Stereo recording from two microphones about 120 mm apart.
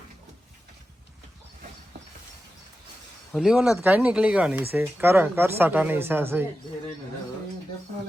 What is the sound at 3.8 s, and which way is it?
Speech, 15° right (ahead or behind).